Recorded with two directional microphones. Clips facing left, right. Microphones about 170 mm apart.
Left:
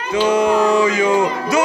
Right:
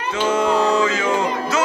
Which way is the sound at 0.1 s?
15° left (ahead or behind).